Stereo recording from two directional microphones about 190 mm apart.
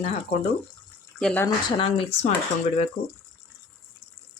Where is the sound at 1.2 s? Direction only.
5° left (ahead or behind).